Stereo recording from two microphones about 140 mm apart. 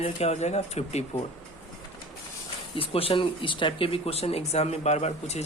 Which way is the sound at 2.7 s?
40° left (ahead or behind).